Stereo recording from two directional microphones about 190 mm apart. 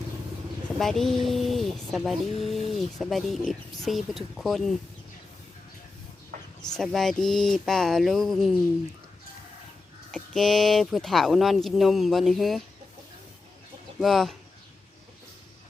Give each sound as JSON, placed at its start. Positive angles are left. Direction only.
{"t": 0.8, "sound": "speech", "side_deg": 0}
{"t": 6.3, "sound": "a sound", "side_deg": -45}
{"t": 6.7, "sound": "speech", "side_deg": 0}
{"t": 10.1, "sound": "speech", "side_deg": 5}
{"t": 14.0, "sound": "speech", "side_deg": 0}